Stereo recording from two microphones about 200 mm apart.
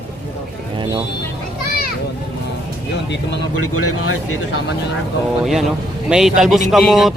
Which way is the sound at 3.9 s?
90° left.